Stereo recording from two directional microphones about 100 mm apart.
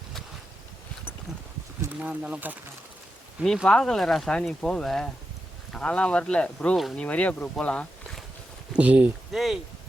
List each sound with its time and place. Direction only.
1.8 s speech: 15° right (ahead or behind)
3.4 s speech: 5° left (ahead or behind)
8.7 s speech: 15° right (ahead or behind)
9.3 s speech: centre (ahead or behind)